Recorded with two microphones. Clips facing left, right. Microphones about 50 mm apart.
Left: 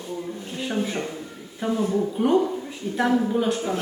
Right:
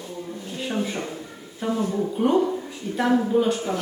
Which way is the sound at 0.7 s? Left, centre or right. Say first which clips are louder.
Left 1 dB; centre.